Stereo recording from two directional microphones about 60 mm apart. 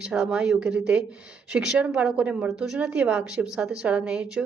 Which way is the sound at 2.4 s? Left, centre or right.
Centre.